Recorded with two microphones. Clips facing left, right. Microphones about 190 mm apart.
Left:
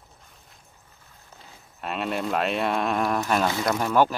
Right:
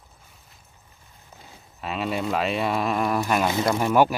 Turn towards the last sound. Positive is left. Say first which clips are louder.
# right 2 dB
turn(degrees=-10)  # may be behind; listen again after turning